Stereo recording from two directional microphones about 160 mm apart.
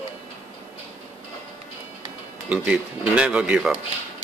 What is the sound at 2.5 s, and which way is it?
Speech, 10° right (ahead or behind).